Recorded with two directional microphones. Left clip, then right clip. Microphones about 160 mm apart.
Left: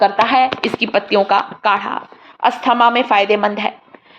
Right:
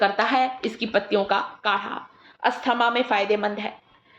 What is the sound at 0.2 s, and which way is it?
Speech, 10° left (ahead or behind).